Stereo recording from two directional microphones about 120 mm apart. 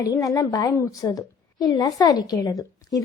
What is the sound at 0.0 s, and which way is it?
A woman's voice, 30° left (ahead or behind).